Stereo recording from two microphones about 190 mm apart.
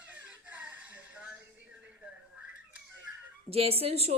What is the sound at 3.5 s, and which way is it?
Speech, 30° right (ahead or behind).